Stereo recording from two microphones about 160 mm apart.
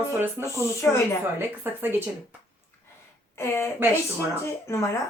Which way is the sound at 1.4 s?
15° right (ahead or behind).